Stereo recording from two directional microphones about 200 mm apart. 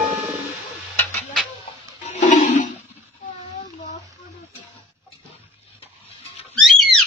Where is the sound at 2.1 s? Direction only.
35° left (ahead or behind).